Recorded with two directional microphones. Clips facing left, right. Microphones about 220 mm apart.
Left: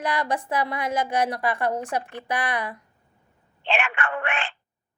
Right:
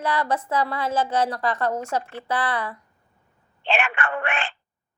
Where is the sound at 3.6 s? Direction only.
35° right (ahead or behind).